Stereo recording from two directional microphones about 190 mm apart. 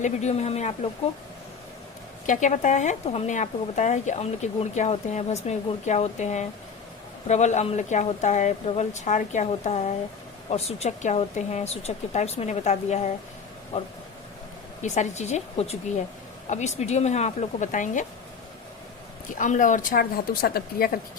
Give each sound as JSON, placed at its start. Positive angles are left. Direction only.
{"t": 0.0, "sound": "speech", "side_deg": 35}
{"t": 2.2, "sound": "speech", "side_deg": 40}
{"t": 14.8, "sound": "speech", "side_deg": 40}
{"t": 19.4, "sound": "a woman's voice", "side_deg": 40}